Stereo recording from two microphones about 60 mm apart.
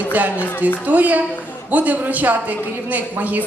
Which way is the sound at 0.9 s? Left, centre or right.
Right.